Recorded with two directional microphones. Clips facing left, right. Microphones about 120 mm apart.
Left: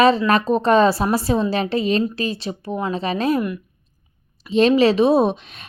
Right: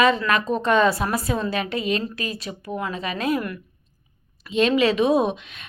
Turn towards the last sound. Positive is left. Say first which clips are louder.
# left 3 dB
turn(degrees=35)  # may be behind; listen again after turning